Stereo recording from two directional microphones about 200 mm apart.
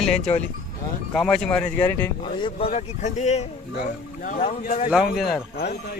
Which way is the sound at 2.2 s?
25° left (ahead or behind).